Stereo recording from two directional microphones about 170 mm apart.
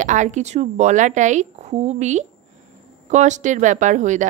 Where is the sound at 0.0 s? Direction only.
45° right (ahead or behind).